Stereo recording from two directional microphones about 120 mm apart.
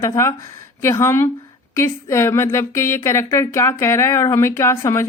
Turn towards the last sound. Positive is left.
turn(degrees=25)  # may be behind; listen again after turning